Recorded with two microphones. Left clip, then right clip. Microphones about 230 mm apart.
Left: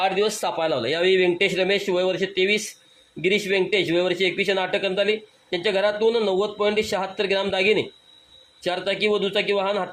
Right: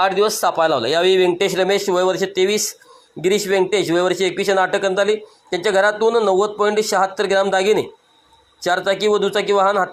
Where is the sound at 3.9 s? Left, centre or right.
Centre.